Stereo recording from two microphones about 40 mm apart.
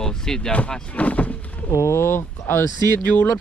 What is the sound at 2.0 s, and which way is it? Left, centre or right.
Speech, left.